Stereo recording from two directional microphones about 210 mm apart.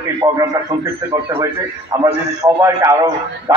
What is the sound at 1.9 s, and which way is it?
A man's voice, 15° right (ahead or behind).